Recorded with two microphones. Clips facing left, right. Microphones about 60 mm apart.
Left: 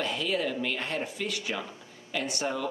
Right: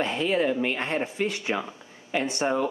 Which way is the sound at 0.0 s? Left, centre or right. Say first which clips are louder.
Right 5 dB; right.